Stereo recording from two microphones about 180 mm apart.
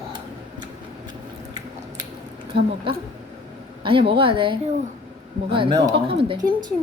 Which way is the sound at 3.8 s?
30° right (ahead or behind).